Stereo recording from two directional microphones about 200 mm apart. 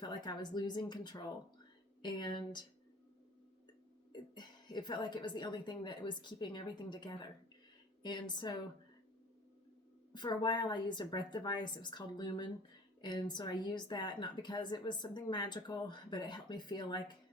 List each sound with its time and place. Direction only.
0.0 s a woman's voice: 20° left (ahead or behind)
4.1 s a woman's voice: 20° left (ahead or behind)
10.1 s a woman's voice: 20° left (ahead or behind)